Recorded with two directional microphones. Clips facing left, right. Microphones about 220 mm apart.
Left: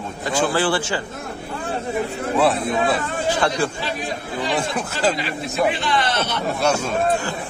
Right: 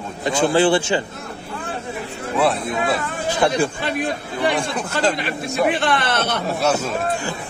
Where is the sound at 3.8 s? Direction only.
60° right (ahead or behind).